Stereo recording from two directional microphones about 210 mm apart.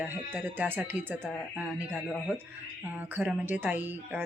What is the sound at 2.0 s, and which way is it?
Speech, 5° left (ahead or behind).